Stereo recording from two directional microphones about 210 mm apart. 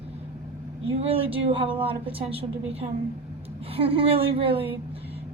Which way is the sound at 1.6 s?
25° right (ahead or behind).